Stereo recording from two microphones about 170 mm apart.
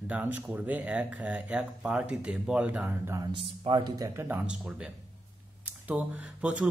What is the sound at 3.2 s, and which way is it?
Speech, 30° right (ahead or behind).